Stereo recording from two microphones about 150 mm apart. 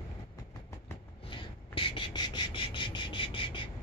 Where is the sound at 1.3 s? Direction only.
35° left (ahead or behind).